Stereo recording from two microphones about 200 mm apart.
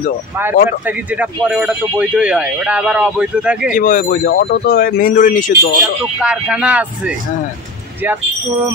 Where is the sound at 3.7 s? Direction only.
45° left (ahead or behind).